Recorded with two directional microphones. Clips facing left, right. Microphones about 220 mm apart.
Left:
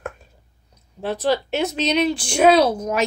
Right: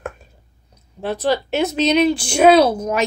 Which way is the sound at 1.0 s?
Centre (ahead or behind).